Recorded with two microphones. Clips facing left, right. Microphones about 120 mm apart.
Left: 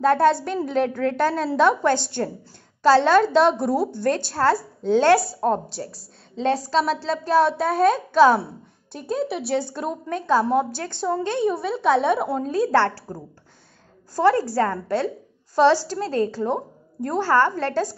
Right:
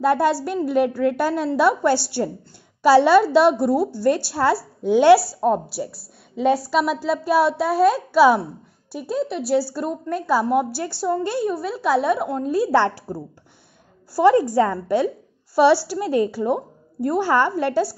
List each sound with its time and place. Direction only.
0.0 s a woman's voice: 10° right (ahead or behind)